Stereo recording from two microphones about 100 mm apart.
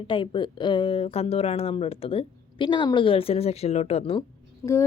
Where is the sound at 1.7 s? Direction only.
70° left (ahead or behind).